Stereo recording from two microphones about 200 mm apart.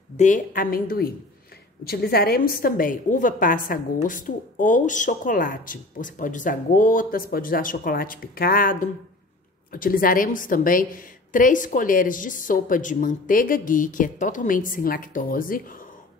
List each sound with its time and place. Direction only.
0.2 s a woman's voice: 40° left (ahead or behind)